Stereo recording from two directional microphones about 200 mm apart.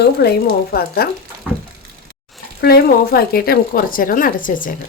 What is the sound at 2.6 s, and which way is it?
Speech, 50° left (ahead or behind).